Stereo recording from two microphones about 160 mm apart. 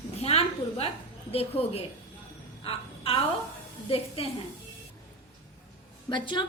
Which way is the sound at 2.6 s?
35° left (ahead or behind).